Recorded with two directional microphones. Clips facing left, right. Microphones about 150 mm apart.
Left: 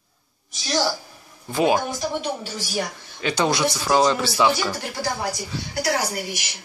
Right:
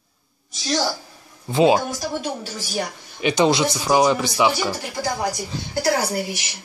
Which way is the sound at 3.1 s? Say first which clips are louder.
Right 4 dB; 20° right (ahead or behind).